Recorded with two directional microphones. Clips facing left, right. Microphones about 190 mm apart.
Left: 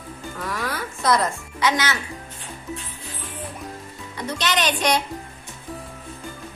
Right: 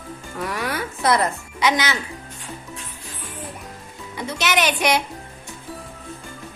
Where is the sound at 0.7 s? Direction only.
65° right (ahead or behind).